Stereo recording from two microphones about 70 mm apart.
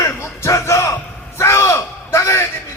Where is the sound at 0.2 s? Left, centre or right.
Left.